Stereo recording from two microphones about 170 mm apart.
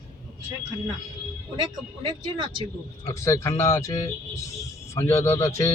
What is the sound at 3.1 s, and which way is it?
Speech, 15° left (ahead or behind).